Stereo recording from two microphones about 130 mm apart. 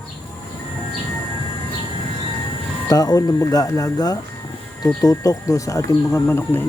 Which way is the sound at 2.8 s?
30° left (ahead or behind).